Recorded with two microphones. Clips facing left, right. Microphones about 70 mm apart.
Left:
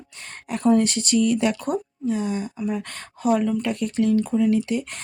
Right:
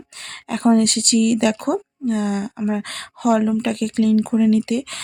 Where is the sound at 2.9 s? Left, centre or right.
Right.